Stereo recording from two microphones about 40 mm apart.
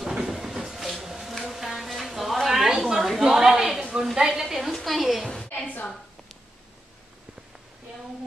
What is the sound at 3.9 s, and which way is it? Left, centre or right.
Speech, centre.